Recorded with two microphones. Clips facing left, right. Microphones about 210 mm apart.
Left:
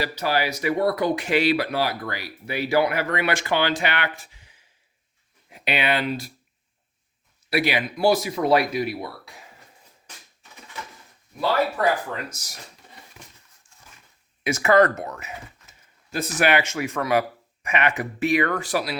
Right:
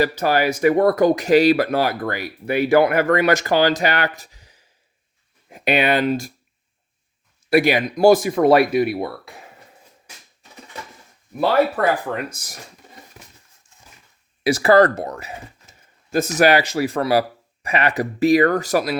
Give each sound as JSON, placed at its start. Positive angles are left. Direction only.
{"t": 0.0, "sound": "speech", "side_deg": -50}
{"t": 7.5, "sound": "speech", "side_deg": -45}
{"t": 11.3, "sound": "speech", "side_deg": -60}
{"t": 14.4, "sound": "speech", "side_deg": -35}
{"t": 16.4, "sound": "speech", "side_deg": -35}